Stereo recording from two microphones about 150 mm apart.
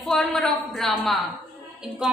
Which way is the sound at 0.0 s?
5° left (ahead or behind).